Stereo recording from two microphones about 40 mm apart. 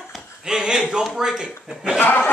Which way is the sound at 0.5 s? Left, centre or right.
Centre.